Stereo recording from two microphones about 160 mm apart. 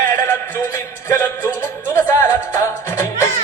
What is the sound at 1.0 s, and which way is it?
Music, 15° left (ahead or behind).